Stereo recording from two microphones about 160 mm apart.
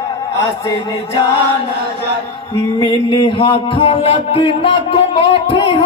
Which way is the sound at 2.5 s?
25° left (ahead or behind).